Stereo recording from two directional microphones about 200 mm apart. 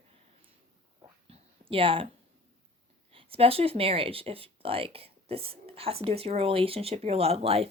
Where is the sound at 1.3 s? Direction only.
25° right (ahead or behind).